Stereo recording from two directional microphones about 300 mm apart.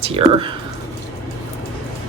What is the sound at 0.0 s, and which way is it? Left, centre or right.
Speech, centre.